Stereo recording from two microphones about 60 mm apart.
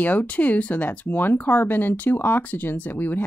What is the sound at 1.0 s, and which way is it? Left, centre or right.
Speech, left.